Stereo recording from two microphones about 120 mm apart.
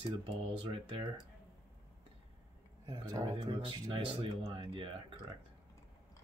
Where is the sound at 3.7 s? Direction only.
35° right (ahead or behind).